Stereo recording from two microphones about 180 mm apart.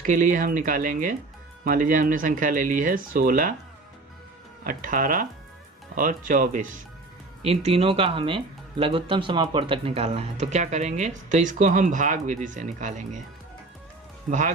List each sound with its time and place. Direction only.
0.0 s speech: 45° right (ahead or behind)
4.6 s speech: 50° right (ahead or behind)
7.4 s speech: 35° right (ahead or behind)
14.3 s speech: 45° right (ahead or behind)